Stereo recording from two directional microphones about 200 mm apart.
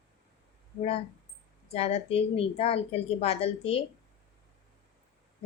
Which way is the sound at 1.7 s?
30° left (ahead or behind).